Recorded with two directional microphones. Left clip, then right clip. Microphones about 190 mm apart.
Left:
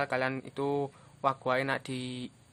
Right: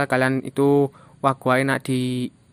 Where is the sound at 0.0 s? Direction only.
40° right (ahead or behind).